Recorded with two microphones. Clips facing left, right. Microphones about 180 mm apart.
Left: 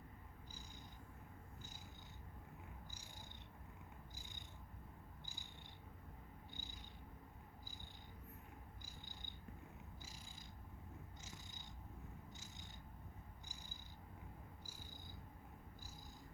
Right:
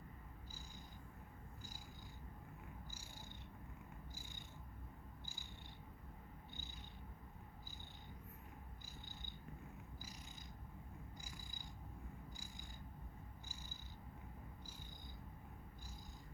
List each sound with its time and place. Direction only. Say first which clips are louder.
5.2 s cat: right 1 dB; 15° left (ahead or behind)
10.0 s purr: right 2 dB; 25° left (ahead or behind)
12.3 s cat: right 2 dB; 25° left (ahead or behind)